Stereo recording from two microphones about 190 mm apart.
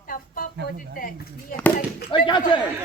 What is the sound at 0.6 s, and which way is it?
Speech, 50° left (ahead or behind).